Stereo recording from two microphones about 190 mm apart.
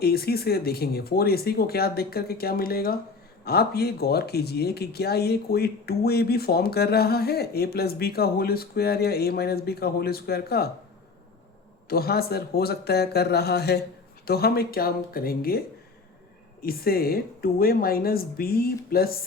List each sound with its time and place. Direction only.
0.0 s speech: 55° left (ahead or behind)
11.9 s speech: 55° left (ahead or behind)
16.6 s speech: 55° left (ahead or behind)